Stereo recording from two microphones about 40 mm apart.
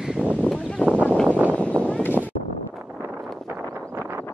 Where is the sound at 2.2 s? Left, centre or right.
Left.